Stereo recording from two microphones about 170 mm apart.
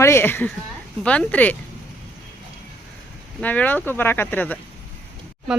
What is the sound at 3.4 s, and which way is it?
Speech, 10° left (ahead or behind).